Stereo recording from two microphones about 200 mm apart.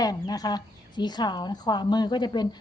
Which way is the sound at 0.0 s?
20° left (ahead or behind).